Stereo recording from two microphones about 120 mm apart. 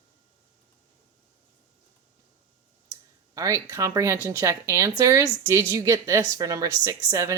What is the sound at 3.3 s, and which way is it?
A woman's voice, 30° right (ahead or behind).